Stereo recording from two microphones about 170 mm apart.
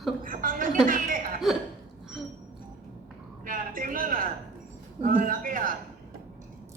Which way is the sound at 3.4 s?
55° right (ahead or behind).